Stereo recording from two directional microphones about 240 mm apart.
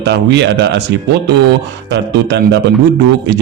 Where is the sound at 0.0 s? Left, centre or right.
Right.